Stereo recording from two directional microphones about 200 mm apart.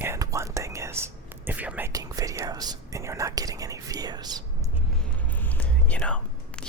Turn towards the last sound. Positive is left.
turn(degrees=5)  # may be behind; listen again after turning